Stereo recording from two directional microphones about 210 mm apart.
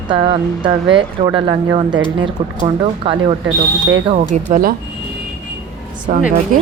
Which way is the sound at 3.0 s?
25° right (ahead or behind).